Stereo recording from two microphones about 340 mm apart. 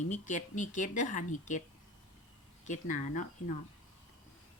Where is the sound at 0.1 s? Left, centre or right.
Left.